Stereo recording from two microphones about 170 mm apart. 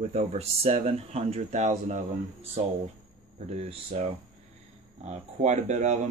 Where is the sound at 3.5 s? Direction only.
40° right (ahead or behind).